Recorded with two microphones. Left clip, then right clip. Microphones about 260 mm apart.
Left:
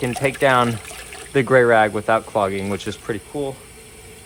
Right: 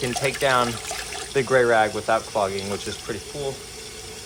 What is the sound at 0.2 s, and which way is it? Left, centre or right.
Speech, left.